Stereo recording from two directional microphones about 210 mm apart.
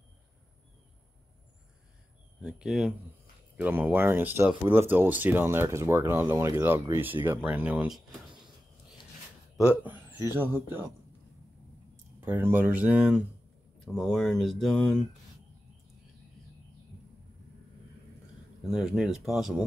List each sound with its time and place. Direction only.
2.4 s speech: centre (ahead or behind)
9.7 s speech: 10° right (ahead or behind)
12.2 s speech: 10° right (ahead or behind)
18.7 s speech: centre (ahead or behind)